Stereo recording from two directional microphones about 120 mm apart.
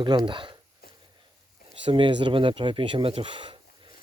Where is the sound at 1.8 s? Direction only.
45° right (ahead or behind).